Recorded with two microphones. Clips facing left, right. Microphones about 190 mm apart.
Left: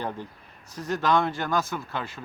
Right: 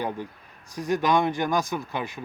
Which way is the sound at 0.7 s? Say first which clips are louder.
Right 2 dB; 15° right (ahead or behind).